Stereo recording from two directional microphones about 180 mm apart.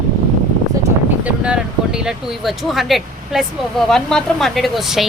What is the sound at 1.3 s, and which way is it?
Speech, 5° right (ahead or behind).